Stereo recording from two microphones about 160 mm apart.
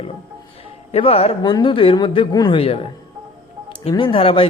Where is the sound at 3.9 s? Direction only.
30° left (ahead or behind).